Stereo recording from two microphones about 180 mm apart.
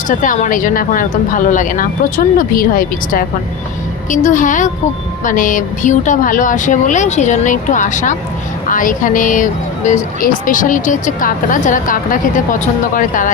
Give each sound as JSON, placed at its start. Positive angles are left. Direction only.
{"t": 0.1, "sound": "speech", "side_deg": 45}